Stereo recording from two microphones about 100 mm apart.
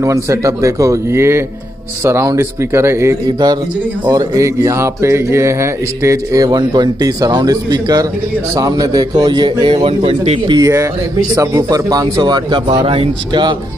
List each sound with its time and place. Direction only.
0.0 s speech: 30° right (ahead or behind)
3.3 s speech: 45° right (ahead or behind)
10.0 s speech: 90° right
10.6 s speech: 30° right (ahead or behind); by 13.4 s 65° right (ahead or behind)